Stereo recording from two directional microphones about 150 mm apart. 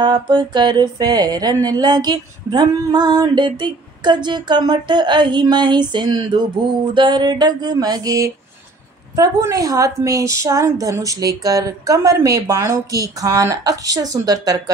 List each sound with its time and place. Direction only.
0.0 s speech: 30° right (ahead or behind)